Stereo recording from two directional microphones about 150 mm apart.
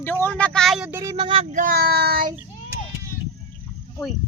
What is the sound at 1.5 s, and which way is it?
Speech, 65° right (ahead or behind).